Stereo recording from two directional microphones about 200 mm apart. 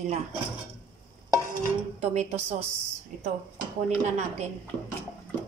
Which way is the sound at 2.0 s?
35° right (ahead or behind).